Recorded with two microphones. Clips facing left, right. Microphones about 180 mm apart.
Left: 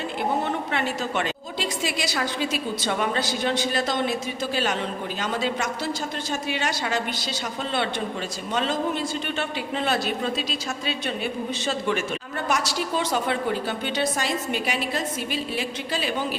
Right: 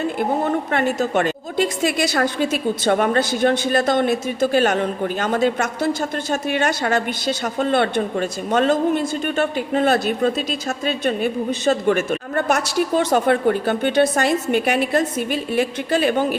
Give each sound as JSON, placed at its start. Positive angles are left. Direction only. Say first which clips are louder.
{"t": 0.2, "sound": "a woman's voice", "louder": "right 3 dB", "side_deg": -50}